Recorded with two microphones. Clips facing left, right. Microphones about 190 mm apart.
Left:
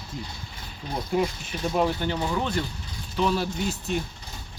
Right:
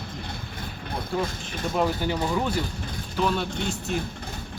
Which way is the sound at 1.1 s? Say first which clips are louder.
Left 3 dB; 15° left (ahead or behind).